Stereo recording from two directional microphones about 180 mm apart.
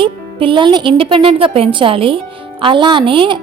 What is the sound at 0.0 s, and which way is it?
Speech, 30° right (ahead or behind).